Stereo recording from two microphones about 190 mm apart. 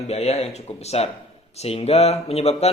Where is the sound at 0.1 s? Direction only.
35° left (ahead or behind).